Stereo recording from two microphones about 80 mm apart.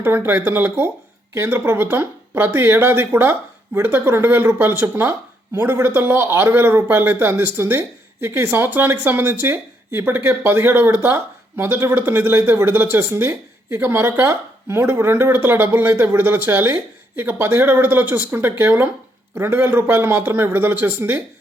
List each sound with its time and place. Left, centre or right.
0.0 s a man's voice: right